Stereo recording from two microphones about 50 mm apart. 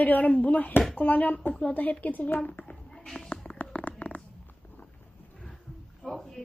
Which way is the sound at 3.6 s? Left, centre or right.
Left.